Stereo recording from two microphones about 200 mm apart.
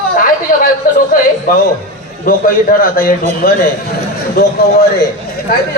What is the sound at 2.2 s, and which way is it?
Speech, 45° left (ahead or behind).